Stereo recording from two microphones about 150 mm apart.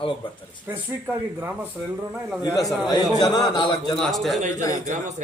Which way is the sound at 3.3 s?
30° left (ahead or behind).